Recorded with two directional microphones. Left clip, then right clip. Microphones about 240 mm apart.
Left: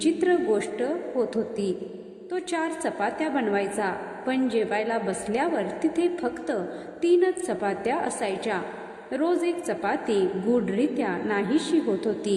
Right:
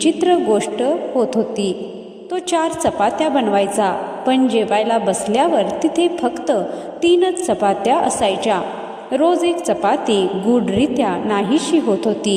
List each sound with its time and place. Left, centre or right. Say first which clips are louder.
0.0 s a woman's voice: right 8 dB; right
2.3 s a woman's voice: right 10 dB; right